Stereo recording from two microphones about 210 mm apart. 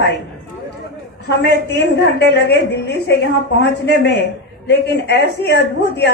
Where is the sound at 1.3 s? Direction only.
55° left (ahead or behind).